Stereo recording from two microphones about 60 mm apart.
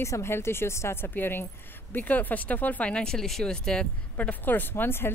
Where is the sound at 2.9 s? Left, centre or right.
Centre.